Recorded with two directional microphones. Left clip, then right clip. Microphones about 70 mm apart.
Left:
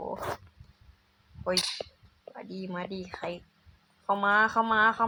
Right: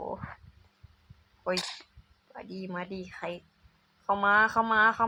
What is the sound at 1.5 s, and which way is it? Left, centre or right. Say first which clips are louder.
Speech: left 4 dB; left.